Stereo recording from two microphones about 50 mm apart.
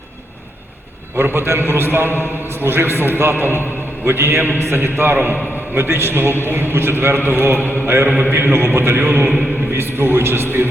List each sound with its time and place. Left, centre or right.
1.1 s a man's voice: right
5.7 s a man's voice: right